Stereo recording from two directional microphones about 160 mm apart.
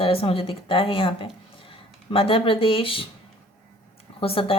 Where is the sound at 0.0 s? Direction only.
35° left (ahead or behind).